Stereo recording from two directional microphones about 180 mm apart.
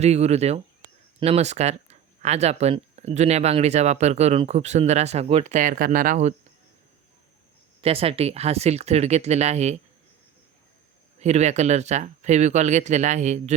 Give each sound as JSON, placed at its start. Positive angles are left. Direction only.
{"t": 0.0, "sound": "speech", "side_deg": -35}
{"t": 7.8, "sound": "speech", "side_deg": -35}
{"t": 11.2, "sound": "speech", "side_deg": -40}